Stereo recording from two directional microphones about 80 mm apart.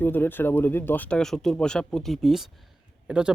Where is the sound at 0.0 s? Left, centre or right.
Left.